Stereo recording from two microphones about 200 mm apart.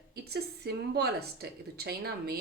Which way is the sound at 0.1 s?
50° right (ahead or behind).